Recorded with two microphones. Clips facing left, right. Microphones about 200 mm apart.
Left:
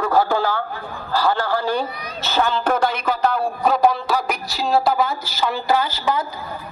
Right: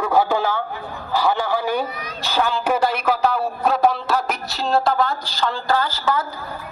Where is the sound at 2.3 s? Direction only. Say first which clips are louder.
Left 1 dB; 5° right (ahead or behind); by 6.2 s 15° left (ahead or behind).